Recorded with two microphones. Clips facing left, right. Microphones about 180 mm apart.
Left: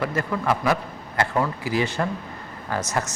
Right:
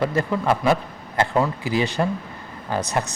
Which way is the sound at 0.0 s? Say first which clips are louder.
Right 3 dB; 25° right (ahead or behind).